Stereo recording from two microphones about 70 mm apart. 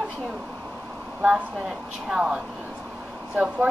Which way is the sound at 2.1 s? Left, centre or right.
Centre.